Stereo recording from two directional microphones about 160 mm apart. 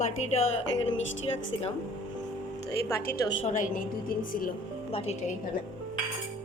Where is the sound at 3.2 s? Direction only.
30° left (ahead or behind).